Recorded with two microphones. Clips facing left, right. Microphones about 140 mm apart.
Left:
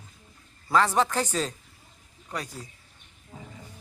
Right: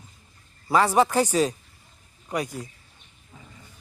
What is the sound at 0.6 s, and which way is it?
Speech, 10° right (ahead or behind).